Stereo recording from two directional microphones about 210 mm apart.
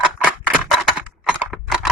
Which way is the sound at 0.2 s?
5° right (ahead or behind).